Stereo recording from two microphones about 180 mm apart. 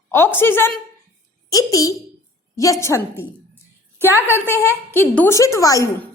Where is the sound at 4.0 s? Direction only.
10° right (ahead or behind).